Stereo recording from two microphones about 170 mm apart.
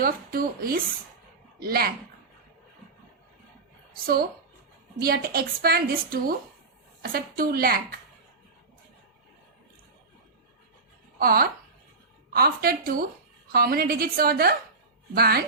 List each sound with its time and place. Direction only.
0.0 s a woman's voice: 60° right (ahead or behind)
4.0 s a woman's voice: 60° right (ahead or behind)
11.2 s a woman's voice: 60° right (ahead or behind)